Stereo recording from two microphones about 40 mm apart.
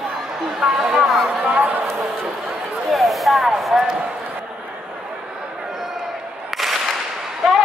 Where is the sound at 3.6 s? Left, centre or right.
Centre.